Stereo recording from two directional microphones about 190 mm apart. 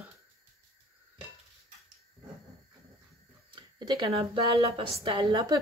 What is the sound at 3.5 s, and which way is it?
Speech, 25° right (ahead or behind).